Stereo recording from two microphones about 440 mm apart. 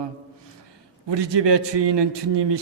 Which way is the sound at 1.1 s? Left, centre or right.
Right.